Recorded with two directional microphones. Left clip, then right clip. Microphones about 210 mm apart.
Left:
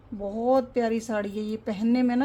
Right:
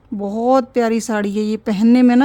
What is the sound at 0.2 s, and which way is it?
A woman's voice, 50° right (ahead or behind).